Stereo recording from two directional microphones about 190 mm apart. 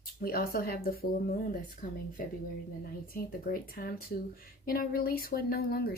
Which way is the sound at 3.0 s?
50° left (ahead or behind).